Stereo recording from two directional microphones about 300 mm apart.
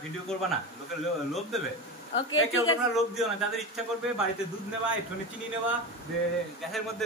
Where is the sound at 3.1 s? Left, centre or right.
Centre.